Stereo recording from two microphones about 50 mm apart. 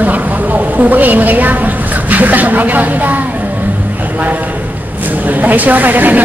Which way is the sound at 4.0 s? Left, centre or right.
Right.